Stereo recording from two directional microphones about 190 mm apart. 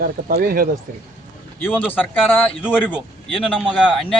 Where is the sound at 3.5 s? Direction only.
Centre (ahead or behind).